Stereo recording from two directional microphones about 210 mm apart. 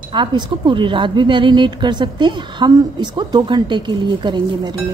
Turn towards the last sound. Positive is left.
turn(degrees=-20)  # may be behind; listen again after turning